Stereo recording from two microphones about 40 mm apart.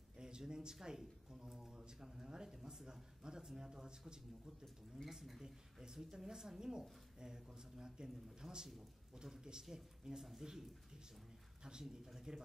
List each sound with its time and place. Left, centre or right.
0.2 s a sound: centre
0.7 s speech: centre
4.9 s speech: centre
5.4 s speech: centre
11.8 s speech: centre